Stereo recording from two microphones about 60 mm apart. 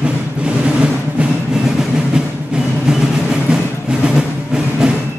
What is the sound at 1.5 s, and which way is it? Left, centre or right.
Timpani, centre.